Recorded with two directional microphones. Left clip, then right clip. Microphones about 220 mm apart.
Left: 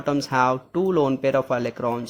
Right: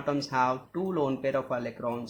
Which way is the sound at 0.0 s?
35° left (ahead or behind).